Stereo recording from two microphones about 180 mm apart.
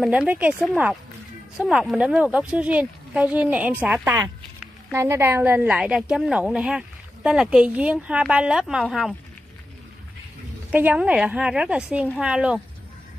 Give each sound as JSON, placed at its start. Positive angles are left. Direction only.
{"t": 0.0, "sound": "a woman's voice", "side_deg": -5}
{"t": 10.7, "sound": "a woman's voice", "side_deg": -10}